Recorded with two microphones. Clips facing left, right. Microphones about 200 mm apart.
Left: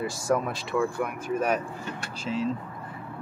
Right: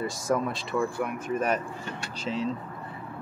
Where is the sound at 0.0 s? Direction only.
Centre (ahead or behind).